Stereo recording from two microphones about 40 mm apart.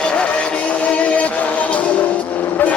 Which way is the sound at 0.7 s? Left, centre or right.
Left.